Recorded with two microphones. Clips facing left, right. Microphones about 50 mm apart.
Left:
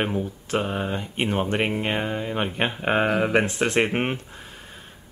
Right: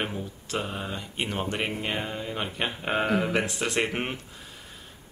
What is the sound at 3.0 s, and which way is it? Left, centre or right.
Speech, left.